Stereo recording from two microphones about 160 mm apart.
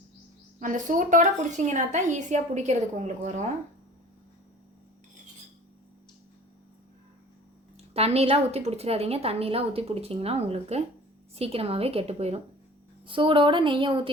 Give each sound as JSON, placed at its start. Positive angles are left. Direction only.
{"t": 0.6, "sound": "a woman's voice", "side_deg": -50}
{"t": 7.8, "sound": "a woman's voice", "side_deg": -40}